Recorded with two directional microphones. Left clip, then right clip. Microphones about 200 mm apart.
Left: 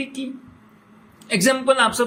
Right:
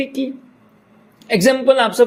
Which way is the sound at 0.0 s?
25° right (ahead or behind).